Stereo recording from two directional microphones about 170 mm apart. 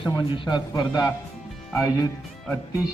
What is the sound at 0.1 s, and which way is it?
A man's voice, 25° left (ahead or behind).